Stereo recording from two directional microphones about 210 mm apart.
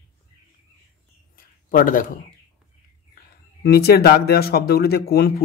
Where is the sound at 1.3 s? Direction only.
40° left (ahead or behind).